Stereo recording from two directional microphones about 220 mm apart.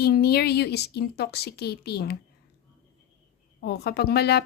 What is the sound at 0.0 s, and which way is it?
Speech, 45° left (ahead or behind).